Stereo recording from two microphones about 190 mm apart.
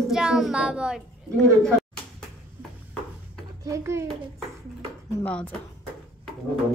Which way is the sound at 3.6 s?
15° right (ahead or behind).